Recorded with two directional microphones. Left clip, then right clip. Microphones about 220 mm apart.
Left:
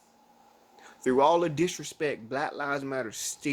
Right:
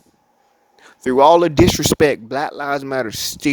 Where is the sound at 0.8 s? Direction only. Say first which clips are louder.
Right 11 dB; 45° right (ahead or behind).